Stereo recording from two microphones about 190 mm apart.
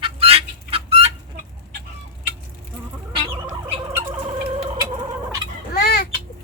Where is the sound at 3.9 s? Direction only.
15° right (ahead or behind).